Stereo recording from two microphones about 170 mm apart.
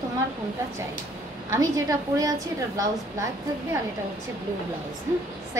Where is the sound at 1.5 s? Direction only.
20° right (ahead or behind).